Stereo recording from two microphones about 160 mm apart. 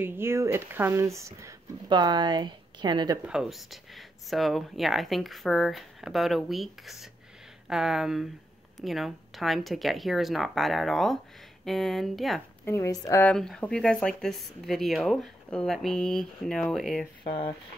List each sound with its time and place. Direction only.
0.0 s speech: 15° right (ahead or behind)
3.3 s speech: centre (ahead or behind)
12.6 s speech: 20° left (ahead or behind)
13.2 s speech: 5° left (ahead or behind)
17.2 s speech: 30° left (ahead or behind)